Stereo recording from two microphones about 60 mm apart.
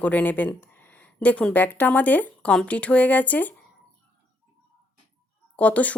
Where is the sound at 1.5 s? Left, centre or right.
Left.